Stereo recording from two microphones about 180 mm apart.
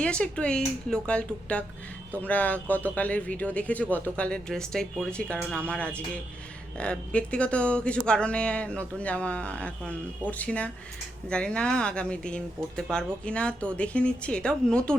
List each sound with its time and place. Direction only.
0.0 s speech: 5° left (ahead or behind)